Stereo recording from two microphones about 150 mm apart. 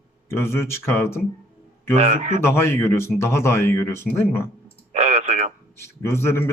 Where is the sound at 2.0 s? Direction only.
55° right (ahead or behind).